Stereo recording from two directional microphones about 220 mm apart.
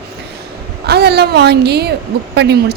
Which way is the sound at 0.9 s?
50° right (ahead or behind).